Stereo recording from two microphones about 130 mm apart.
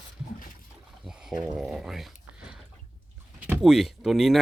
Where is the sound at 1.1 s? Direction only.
5° right (ahead or behind).